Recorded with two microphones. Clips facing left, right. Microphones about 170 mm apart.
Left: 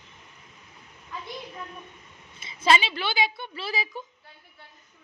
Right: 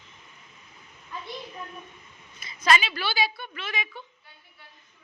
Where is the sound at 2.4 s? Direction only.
25° left (ahead or behind).